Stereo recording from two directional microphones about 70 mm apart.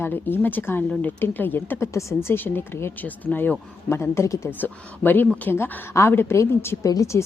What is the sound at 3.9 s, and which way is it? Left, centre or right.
Speech, left.